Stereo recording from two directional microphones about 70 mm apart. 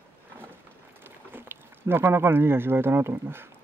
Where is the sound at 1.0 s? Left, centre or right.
Right.